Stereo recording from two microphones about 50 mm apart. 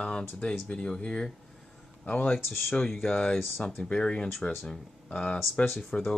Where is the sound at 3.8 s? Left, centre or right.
Left.